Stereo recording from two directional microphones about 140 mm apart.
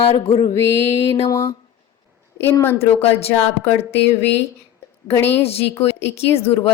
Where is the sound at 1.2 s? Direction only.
20° left (ahead or behind).